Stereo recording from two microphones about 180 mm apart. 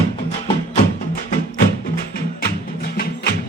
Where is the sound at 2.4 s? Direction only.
55° left (ahead or behind).